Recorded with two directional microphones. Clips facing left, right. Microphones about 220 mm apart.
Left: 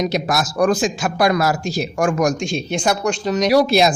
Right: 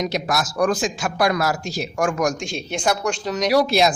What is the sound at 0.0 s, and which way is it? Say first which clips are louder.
A man's voice: left 3 dB; 25° left (ahead or behind).